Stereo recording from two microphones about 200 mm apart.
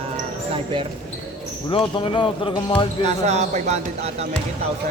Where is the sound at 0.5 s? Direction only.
25° right (ahead or behind).